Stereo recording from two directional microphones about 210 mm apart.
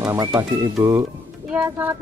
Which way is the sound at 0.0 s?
15° right (ahead or behind).